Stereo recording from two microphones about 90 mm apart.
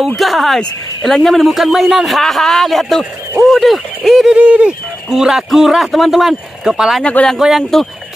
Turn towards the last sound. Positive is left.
turn(degrees=0)  # may be behind; listen again after turning